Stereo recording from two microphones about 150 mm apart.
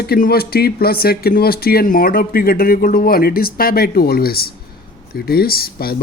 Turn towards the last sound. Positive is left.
turn(degrees=85)